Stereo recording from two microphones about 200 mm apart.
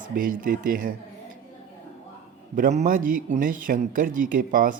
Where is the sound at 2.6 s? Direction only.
40° right (ahead or behind).